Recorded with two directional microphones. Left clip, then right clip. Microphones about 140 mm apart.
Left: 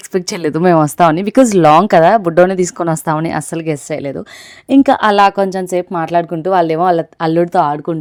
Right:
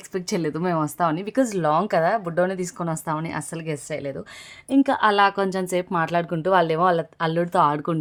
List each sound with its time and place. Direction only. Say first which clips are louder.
0.1 s a woman's voice: left 9 dB; 70° left (ahead or behind); by 7.9 s 25° left (ahead or behind)